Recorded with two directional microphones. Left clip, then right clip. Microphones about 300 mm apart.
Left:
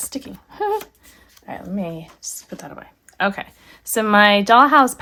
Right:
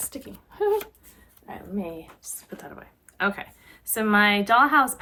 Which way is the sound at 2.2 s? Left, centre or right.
Left.